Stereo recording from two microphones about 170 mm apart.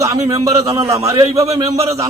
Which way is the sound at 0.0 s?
20° right (ahead or behind).